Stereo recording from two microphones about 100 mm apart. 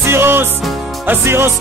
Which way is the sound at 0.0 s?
25° right (ahead or behind).